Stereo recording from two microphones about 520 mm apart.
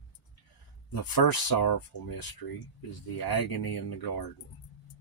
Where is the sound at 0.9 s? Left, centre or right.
Left.